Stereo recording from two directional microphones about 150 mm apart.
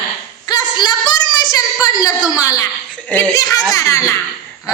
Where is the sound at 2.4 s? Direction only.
20° left (ahead or behind).